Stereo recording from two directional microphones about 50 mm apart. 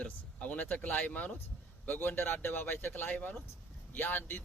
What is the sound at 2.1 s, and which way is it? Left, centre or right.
Speech, left.